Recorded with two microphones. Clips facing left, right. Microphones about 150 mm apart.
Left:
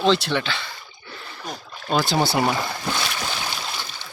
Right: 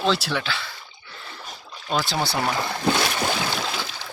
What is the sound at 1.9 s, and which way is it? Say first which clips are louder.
Speech: left 3 dB; centre (ahead or behind).